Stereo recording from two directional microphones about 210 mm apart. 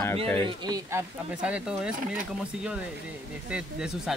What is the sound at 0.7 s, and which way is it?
Speech, 10° right (ahead or behind).